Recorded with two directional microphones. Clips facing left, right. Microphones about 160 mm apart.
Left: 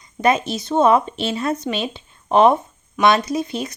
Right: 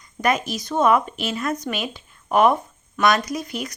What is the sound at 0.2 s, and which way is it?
Speech, 25° left (ahead or behind).